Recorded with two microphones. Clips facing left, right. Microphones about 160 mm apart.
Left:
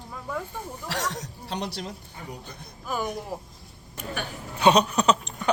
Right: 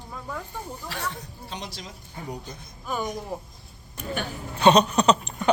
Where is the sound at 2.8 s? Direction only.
5° left (ahead or behind).